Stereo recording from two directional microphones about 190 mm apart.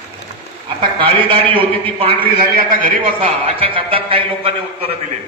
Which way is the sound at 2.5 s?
50° right (ahead or behind).